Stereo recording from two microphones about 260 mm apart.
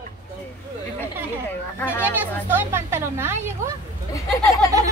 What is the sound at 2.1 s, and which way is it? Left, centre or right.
Speech, centre.